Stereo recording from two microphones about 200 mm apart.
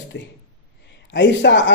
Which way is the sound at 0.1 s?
60° left (ahead or behind).